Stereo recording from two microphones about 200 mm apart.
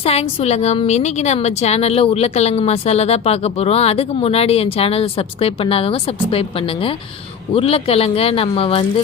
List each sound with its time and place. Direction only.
0.0 s a woman's voice: 30° left (ahead or behind)
7.5 s speech: 30° left (ahead or behind)